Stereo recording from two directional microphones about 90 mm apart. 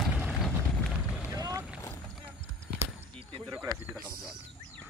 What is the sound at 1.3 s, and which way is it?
Boat, 45° right (ahead or behind).